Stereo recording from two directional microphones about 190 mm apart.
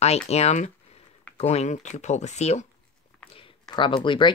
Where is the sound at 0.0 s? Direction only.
35° left (ahead or behind).